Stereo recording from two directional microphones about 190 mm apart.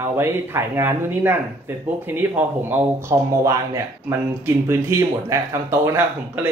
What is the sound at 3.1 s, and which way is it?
Speech, 15° right (ahead or behind).